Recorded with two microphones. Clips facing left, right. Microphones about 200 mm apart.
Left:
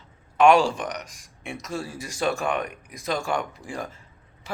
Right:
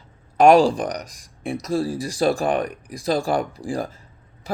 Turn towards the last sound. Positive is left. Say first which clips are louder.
# right 7 dB
turn(degrees=-35)  # may be behind; listen again after turning